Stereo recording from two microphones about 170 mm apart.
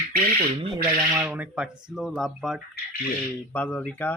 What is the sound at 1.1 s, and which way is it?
Speech, 10° right (ahead or behind).